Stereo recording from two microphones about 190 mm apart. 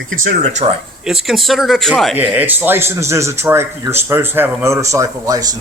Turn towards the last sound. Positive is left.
turn(degrees=-20)  # may be behind; listen again after turning